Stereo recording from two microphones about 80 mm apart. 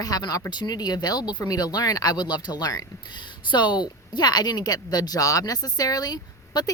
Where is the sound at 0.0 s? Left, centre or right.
Left.